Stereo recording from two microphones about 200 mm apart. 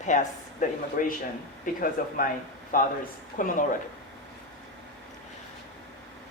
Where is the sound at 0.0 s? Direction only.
40° left (ahead or behind).